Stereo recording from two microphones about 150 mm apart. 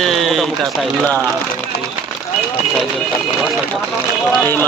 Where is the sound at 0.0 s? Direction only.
Centre (ahead or behind).